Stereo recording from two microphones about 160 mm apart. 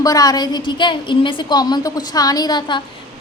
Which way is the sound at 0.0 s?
25° left (ahead or behind).